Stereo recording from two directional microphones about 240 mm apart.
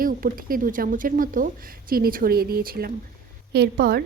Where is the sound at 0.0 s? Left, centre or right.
Right.